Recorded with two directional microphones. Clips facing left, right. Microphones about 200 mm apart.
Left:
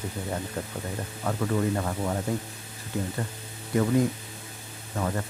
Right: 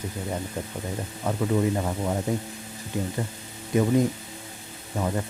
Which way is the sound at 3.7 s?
20° right (ahead or behind).